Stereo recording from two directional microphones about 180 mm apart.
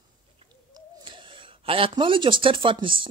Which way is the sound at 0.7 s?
25° right (ahead or behind).